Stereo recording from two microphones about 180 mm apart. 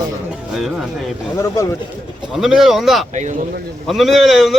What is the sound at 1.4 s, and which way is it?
Speech, 15° left (ahead or behind).